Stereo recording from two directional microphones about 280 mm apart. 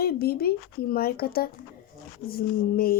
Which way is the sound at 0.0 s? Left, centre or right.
Left.